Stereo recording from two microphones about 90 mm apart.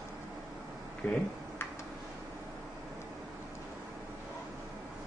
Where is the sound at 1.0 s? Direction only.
15° left (ahead or behind).